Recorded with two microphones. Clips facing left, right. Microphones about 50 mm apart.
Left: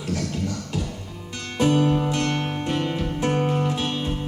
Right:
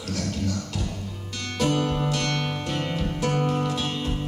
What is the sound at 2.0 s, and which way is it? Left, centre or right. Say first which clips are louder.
Music: left 2 dB; left.